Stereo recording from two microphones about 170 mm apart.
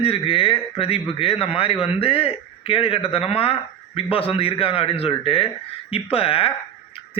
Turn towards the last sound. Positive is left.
turn(degrees=35)  # may be behind; listen again after turning